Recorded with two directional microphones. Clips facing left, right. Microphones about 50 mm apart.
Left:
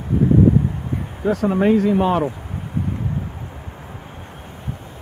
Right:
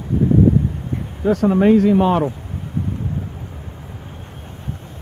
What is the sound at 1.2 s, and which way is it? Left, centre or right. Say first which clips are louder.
Speech: right 3 dB; centre.